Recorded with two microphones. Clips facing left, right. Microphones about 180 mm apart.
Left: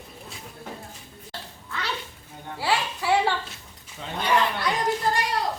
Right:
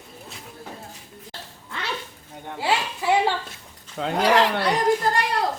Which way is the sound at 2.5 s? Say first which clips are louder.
Right 1 dB; 20° right (ahead or behind).